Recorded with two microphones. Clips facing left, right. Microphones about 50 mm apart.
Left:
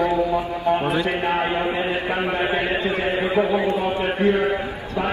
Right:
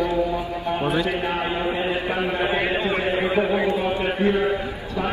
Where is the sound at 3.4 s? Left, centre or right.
Right.